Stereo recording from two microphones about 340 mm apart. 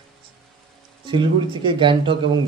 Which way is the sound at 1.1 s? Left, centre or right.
Centre.